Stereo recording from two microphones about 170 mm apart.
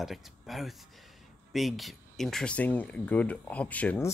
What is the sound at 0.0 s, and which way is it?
Speech, centre (ahead or behind).